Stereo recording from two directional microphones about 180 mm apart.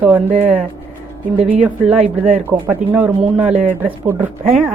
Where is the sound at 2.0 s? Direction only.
45° right (ahead or behind).